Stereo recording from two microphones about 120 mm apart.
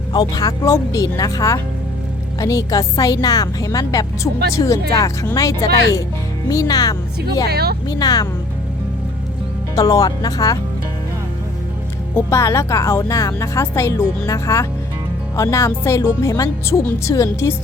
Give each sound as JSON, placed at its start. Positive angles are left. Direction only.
{"t": 0.1, "sound": "a woman's voice", "side_deg": 35}
{"t": 9.7, "sound": "speech", "side_deg": 30}
{"t": 12.3, "sound": "a woman's voice", "side_deg": 25}